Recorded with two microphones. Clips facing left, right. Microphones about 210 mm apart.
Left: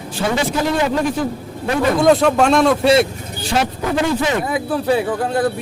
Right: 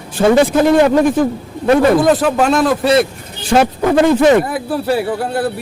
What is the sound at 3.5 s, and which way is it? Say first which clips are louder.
Speech: right 7 dB; 55° right (ahead or behind).